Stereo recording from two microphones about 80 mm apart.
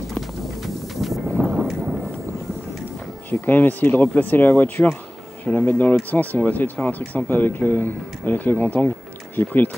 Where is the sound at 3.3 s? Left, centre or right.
Left.